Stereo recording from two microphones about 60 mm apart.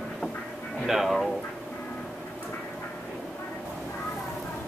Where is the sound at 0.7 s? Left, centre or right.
Centre.